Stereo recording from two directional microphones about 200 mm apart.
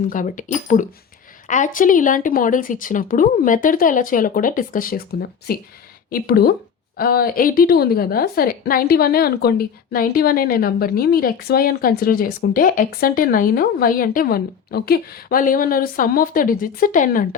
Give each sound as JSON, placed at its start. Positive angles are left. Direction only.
{"t": 0.1, "sound": "a woman's voice", "side_deg": 40}